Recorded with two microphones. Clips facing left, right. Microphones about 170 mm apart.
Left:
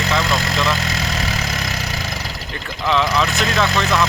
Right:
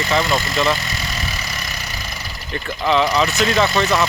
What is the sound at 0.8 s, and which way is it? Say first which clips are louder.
Vehicle: left 4 dB; 90° left.